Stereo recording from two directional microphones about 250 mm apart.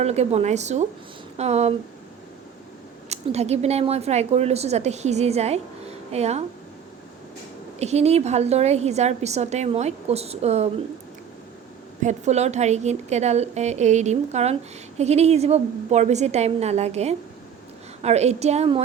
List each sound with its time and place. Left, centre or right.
0.0 s a woman's voice: right
3.1 s a woman's voice: right
7.8 s a woman's voice: right
12.0 s a woman's voice: right